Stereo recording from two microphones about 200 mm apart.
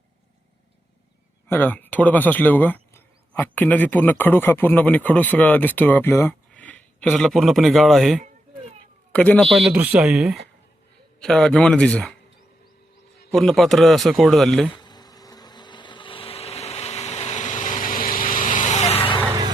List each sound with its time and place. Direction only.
1.5 s speech: 10° left (ahead or behind)
13.3 s speech: centre (ahead or behind)
14.7 s vehicle: 20° left (ahead or behind)
19.2 s vehicle: 20° right (ahead or behind)